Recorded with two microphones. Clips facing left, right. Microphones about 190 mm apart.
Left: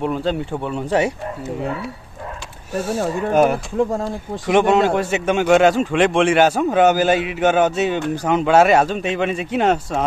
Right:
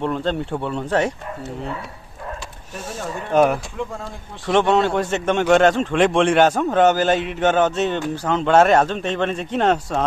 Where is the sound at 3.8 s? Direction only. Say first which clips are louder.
Left 9 dB; 40° left (ahead or behind).